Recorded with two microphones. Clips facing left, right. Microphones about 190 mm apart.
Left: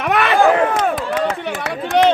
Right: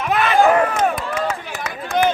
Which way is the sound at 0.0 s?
70° left (ahead or behind).